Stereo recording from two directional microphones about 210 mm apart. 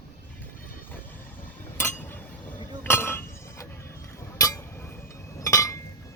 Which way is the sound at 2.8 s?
10° left (ahead or behind).